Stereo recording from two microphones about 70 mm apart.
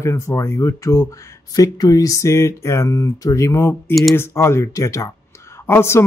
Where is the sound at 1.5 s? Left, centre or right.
Left.